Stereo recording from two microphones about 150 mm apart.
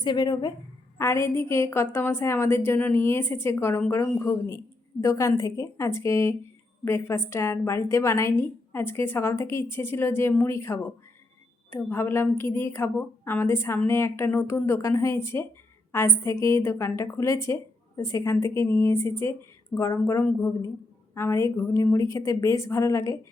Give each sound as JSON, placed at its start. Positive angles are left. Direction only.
{"t": 0.0, "sound": "a woman's voice", "side_deg": 30}
{"t": 0.9, "sound": "a woman's voice", "side_deg": 15}